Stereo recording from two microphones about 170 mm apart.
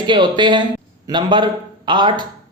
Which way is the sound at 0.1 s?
25° right (ahead or behind).